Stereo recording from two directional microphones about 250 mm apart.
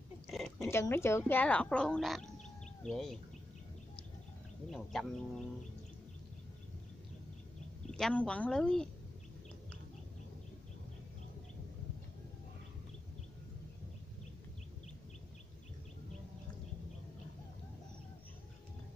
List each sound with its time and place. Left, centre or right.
0.6 s speech: centre
2.2 s a sound: left
2.8 s speech: centre
4.6 s speech: centre
7.9 s speech: centre